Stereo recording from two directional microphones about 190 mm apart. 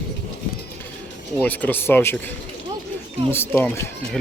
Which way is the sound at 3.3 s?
10° left (ahead or behind).